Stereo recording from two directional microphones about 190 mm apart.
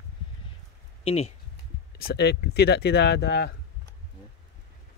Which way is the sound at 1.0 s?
35° left (ahead or behind).